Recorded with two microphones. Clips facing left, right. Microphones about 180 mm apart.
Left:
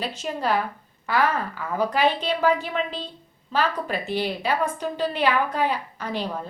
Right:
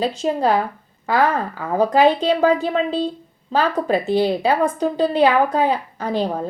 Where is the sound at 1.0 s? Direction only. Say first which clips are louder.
Right 5 dB; 45° right (ahead or behind).